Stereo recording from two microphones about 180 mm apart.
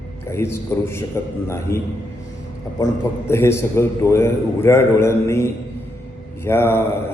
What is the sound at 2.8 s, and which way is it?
A man's voice, 15° left (ahead or behind).